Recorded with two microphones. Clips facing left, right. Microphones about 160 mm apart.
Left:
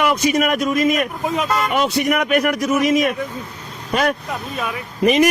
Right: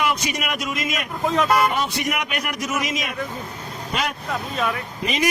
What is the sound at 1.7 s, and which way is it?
Speech, 80° left.